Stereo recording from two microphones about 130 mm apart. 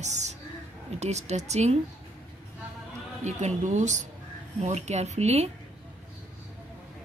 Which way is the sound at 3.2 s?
65° right (ahead or behind).